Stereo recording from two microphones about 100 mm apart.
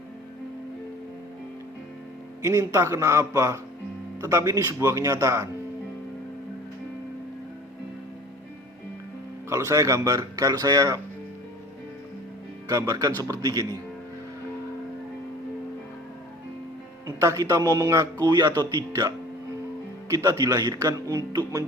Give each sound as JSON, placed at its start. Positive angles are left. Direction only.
{"t": 2.4, "sound": "a man's voice", "side_deg": -30}
{"t": 9.5, "sound": "a man's voice", "side_deg": -30}
{"t": 12.6, "sound": "a man's voice", "side_deg": -35}
{"t": 17.2, "sound": "a man's voice", "side_deg": -30}